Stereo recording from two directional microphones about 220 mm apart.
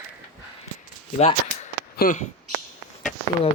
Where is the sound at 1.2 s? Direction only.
30° left (ahead or behind).